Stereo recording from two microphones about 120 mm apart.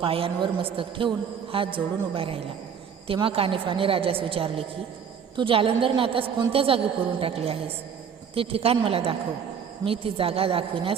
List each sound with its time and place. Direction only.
0.0 s a woman's voice: 50° right (ahead or behind)